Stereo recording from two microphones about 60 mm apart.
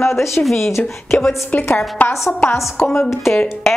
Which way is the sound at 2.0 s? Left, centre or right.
Left.